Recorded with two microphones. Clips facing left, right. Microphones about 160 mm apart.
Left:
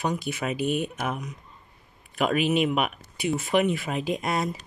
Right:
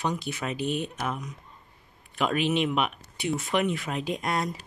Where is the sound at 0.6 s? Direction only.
55° left (ahead or behind).